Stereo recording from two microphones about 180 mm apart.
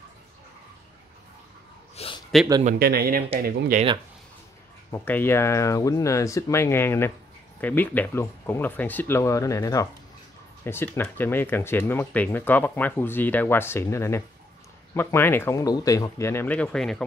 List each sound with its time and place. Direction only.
2.0 s a sound: 35° left (ahead or behind)
2.8 s speech: 60° right (ahead or behind)
4.9 s speech: 10° left (ahead or behind)